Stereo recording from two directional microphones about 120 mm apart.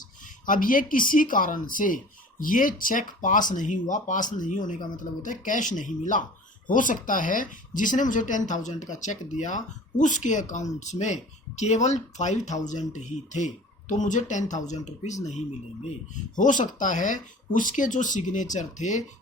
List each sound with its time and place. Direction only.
0.5 s speech: 90° left
10.8 s speech: 75° left (ahead or behind)
12.9 s speech: 80° left
16.3 s speech: 90° left